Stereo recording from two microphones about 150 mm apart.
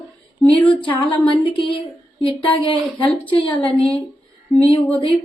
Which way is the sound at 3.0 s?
10° left (ahead or behind).